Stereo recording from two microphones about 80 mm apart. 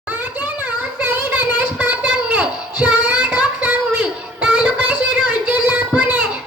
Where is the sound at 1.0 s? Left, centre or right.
Right.